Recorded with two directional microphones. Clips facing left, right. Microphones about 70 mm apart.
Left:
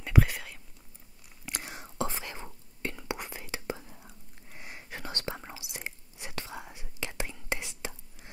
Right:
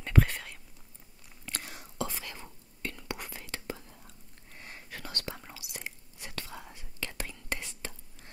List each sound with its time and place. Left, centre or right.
0.0 s whispering: centre
1.4 s whispering: centre